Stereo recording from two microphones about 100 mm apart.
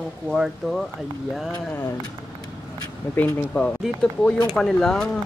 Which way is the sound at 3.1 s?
15° left (ahead or behind).